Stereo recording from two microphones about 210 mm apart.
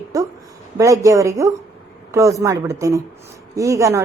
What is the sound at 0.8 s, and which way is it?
Speech, 15° right (ahead or behind).